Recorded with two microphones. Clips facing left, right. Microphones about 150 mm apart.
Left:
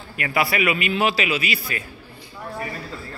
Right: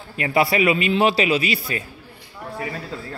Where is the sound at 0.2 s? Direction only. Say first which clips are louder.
Right 4 dB; 30° right (ahead or behind).